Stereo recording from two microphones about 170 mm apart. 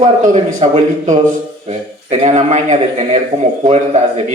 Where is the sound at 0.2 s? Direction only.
45° right (ahead or behind).